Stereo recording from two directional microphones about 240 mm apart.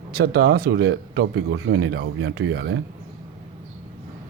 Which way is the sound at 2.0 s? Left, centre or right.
Right.